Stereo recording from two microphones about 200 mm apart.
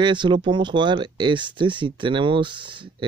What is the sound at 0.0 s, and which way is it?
Speech, 25° right (ahead or behind).